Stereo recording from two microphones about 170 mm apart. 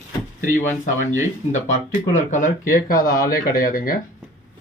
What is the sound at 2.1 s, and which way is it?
Speech, 50° left (ahead or behind).